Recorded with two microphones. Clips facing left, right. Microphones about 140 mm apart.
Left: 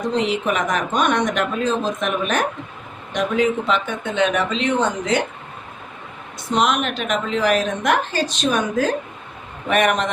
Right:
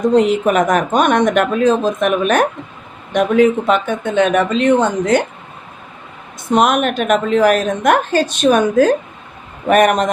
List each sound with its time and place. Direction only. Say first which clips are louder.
0.1 s a woman's voice: right 6 dB; 45° right (ahead or behind)
6.5 s a woman's voice: right 6 dB; 50° right (ahead or behind)